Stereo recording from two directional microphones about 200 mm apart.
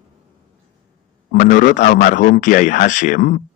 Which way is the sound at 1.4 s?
40° left (ahead or behind).